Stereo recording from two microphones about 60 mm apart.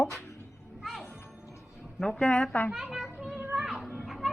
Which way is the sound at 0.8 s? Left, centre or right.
Centre.